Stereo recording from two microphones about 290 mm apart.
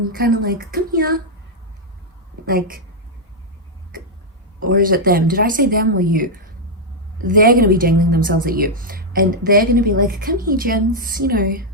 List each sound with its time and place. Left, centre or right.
0.0 s a woman's voice: right
2.5 s speech: right
4.6 s speech: right